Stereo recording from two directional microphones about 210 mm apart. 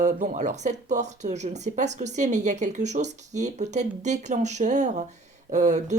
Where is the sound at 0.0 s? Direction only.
35° right (ahead or behind).